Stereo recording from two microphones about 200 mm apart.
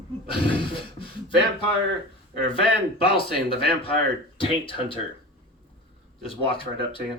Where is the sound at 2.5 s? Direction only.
25° left (ahead or behind).